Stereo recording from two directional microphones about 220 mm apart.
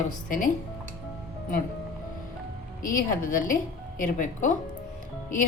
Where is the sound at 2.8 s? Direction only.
40° left (ahead or behind).